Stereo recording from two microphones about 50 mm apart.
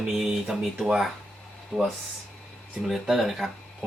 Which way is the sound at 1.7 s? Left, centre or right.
Right.